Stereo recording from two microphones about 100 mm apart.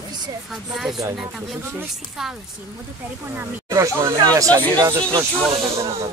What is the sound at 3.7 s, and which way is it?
Speech, 30° right (ahead or behind).